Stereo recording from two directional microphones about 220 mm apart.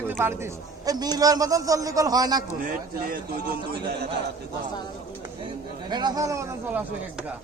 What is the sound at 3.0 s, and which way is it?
Speech, 45° right (ahead or behind).